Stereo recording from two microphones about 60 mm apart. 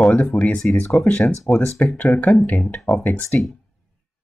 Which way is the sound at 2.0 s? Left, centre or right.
Left.